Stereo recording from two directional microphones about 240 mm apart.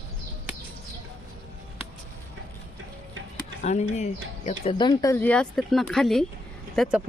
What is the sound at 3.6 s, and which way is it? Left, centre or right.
Speech, left.